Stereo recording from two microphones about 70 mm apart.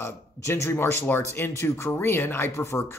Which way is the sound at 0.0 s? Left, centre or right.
Left.